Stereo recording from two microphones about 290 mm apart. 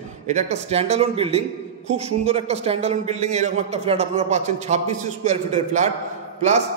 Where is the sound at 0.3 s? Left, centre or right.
Right.